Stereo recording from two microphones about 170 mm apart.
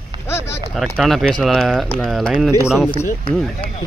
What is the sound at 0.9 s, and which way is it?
Speech, centre (ahead or behind).